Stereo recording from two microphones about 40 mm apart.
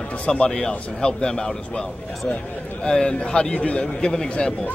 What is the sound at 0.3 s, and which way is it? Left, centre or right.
A man's voice, centre.